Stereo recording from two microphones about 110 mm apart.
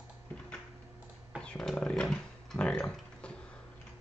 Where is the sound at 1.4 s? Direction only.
5° left (ahead or behind).